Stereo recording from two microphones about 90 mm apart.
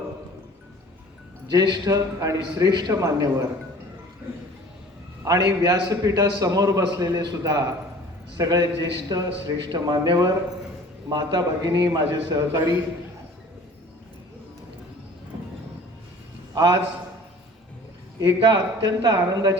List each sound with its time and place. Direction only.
1.5 s a man's voice: 50° right (ahead or behind)
3.0 s a man's voice: 35° right (ahead or behind)
5.2 s a man's voice: 40° right (ahead or behind)
16.6 s a man's voice: 55° right (ahead or behind)
18.2 s a man's voice: 60° right (ahead or behind)